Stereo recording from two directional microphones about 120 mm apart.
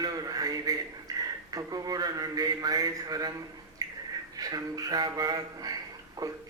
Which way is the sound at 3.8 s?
30° right (ahead or behind).